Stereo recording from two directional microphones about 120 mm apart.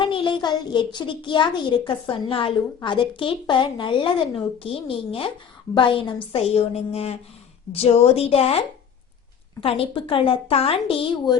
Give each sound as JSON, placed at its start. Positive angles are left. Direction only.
{"t": 0.0, "sound": "a child's voice", "side_deg": 45}